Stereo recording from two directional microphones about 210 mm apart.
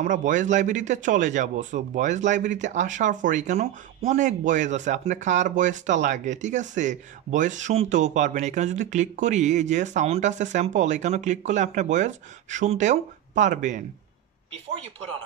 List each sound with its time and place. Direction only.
0.0 s speech: 35° right (ahead or behind)